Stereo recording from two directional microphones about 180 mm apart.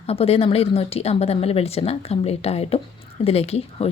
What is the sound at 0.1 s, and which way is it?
Speech, 35° left (ahead or behind).